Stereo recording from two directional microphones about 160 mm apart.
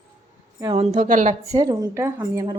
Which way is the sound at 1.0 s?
50° right (ahead or behind).